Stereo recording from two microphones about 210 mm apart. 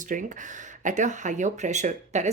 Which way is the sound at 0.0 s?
40° right (ahead or behind).